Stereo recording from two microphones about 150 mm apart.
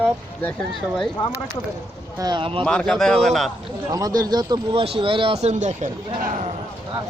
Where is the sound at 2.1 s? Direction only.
30° right (ahead or behind).